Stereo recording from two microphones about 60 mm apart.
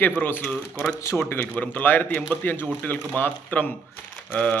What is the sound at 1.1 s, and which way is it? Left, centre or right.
A man's voice, left.